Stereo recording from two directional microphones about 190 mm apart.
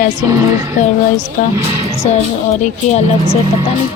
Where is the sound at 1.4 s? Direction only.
45° left (ahead or behind).